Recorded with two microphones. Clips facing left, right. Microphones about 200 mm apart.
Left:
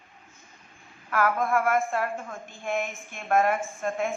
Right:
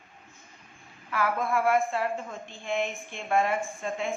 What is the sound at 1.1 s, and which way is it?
A woman's voice, 50° left (ahead or behind).